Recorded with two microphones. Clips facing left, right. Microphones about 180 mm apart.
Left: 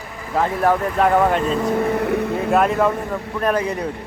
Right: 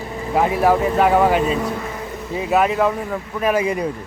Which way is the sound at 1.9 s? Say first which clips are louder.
Left 8 dB; 65° left (ahead or behind).